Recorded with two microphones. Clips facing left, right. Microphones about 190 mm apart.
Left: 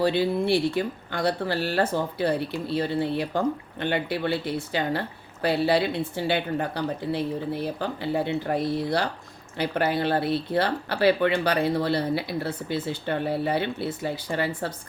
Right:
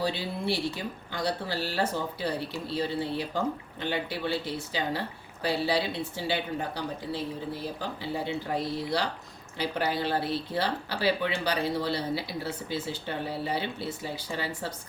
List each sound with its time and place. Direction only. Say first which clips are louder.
0.0 s speech: left 8 dB; 60° left (ahead or behind)